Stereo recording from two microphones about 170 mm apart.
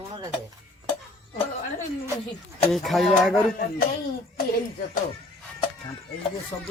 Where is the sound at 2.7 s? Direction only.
Centre (ahead or behind).